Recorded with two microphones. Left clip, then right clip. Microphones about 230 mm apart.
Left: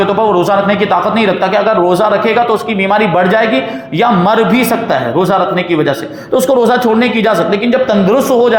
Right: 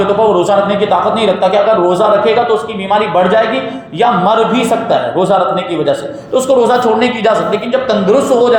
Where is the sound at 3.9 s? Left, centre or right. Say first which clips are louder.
Even; left.